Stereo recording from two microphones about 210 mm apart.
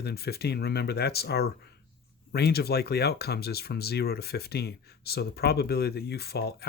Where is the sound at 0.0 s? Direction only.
50° left (ahead or behind).